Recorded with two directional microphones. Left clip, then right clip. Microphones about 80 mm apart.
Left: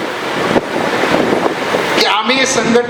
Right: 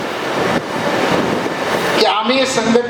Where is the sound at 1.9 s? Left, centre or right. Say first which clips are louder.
Left 1 dB; left.